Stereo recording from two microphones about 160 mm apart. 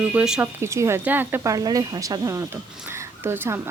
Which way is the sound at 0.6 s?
15° right (ahead or behind).